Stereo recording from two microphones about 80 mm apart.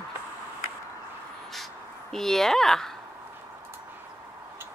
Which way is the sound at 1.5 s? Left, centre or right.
Centre.